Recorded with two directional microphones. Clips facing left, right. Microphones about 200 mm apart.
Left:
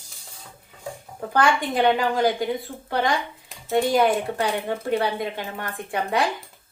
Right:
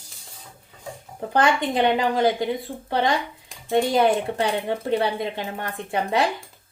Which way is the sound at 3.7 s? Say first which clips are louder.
Right 1 dB; 20° right (ahead or behind).